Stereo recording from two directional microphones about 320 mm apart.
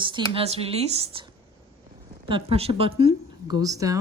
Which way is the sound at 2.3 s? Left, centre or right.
Centre.